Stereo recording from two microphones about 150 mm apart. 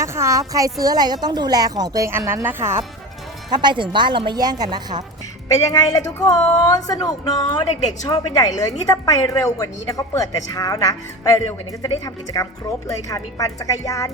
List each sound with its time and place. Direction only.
0.0 s a woman's voice: 20° right (ahead or behind)
3.5 s a woman's voice: 30° right (ahead or behind)
5.5 s a woman's voice: 25° left (ahead or behind)